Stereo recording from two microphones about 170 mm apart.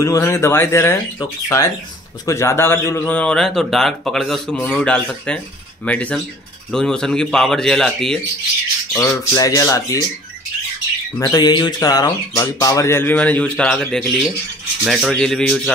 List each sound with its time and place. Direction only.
0.0 s speech: 20° left (ahead or behind)
9.3 s speech: 20° left (ahead or behind)
11.1 s speech: 20° left (ahead or behind); by 15.7 s 5° left (ahead or behind)